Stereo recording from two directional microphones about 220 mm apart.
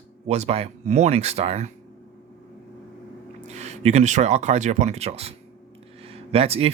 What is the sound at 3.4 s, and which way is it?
Speech, 30° right (ahead or behind).